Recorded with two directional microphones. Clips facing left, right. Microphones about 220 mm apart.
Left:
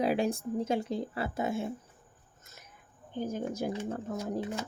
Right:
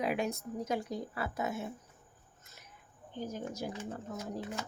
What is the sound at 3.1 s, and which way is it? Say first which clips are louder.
Speech: left 5 dB; 50° left (ahead or behind).